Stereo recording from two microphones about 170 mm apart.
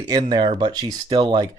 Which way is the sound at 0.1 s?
25° right (ahead or behind).